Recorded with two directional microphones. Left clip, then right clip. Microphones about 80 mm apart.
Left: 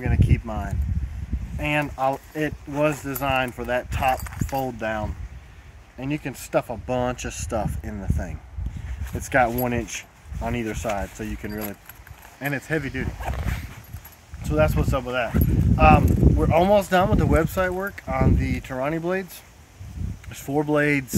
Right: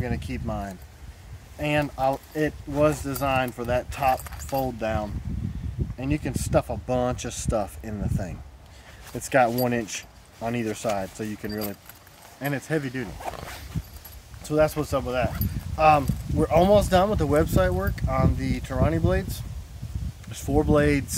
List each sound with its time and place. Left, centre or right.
0.0 s speech: right
4.2 s speech: right
4.7 s speech: right
6.5 s speech: centre
7.0 s speech: right
12.4 s speech: centre
14.4 s speech: right
20.2 s speech: centre